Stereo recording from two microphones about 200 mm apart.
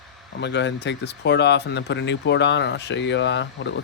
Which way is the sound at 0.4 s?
60° left (ahead or behind).